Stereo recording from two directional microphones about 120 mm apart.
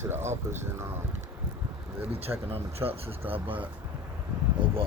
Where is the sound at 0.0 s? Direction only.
20° right (ahead or behind).